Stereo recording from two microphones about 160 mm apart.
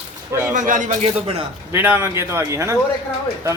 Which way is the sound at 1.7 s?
15° right (ahead or behind).